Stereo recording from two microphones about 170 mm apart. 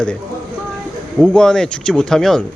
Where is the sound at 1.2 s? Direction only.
5° left (ahead or behind).